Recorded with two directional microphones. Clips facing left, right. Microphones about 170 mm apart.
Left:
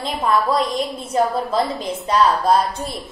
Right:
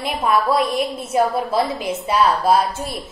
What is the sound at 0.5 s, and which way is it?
A woman's voice, 10° right (ahead or behind).